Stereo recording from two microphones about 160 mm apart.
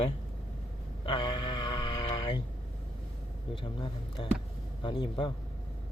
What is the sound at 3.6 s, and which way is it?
Speech, 30° left (ahead or behind).